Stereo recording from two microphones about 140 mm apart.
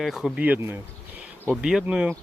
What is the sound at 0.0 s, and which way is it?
Speech, centre (ahead or behind).